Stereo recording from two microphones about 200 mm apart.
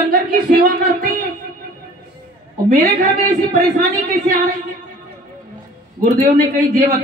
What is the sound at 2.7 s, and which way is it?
Speech, 45° right (ahead or behind).